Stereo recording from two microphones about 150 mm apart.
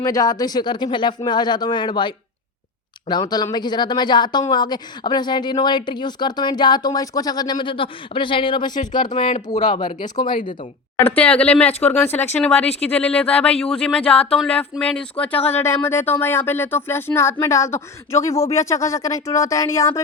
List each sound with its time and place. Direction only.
0.0 s speech: 25° left (ahead or behind)
11.0 s speech: 10° left (ahead or behind)